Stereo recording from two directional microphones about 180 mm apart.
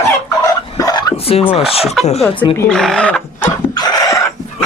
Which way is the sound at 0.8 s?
20° left (ahead or behind).